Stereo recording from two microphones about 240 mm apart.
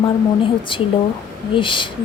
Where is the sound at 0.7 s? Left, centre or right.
Left.